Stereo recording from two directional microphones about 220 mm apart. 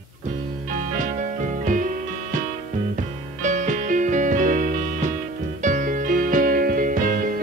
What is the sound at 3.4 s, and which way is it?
Music, 35° right (ahead or behind).